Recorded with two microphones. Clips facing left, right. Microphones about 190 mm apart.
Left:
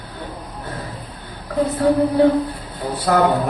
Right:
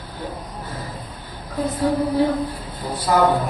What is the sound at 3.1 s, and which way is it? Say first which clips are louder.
Speech: left 2 dB; 65° left (ahead or behind).